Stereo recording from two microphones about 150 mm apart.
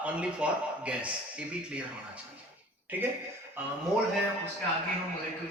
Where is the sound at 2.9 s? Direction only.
10° right (ahead or behind).